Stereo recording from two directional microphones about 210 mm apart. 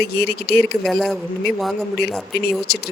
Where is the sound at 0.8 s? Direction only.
Centre (ahead or behind).